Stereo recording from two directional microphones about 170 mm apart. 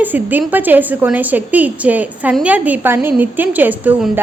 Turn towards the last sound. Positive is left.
turn(degrees=-10)  # may be behind; listen again after turning